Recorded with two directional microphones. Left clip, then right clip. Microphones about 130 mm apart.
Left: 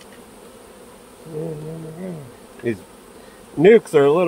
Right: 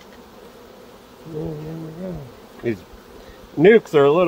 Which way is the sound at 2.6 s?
20° right (ahead or behind).